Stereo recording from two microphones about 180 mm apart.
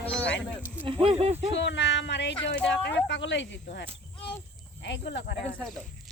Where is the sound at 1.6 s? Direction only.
80° left.